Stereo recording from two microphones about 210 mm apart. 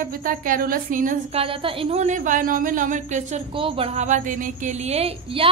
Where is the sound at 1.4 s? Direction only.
25° right (ahead or behind).